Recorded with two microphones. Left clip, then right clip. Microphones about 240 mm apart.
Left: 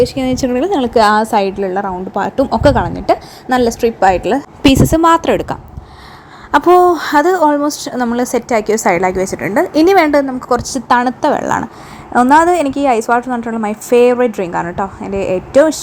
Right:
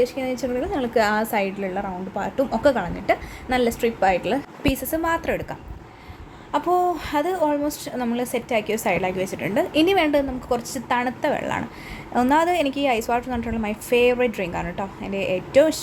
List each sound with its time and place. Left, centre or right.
0.0 s a woman's voice: left
7.9 s a woman's voice: centre
10.5 s a woman's voice: left